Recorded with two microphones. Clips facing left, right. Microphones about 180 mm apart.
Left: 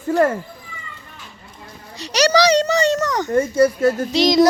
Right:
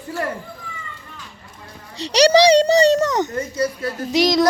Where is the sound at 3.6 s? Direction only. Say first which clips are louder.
Left 8 dB; 45° left (ahead or behind).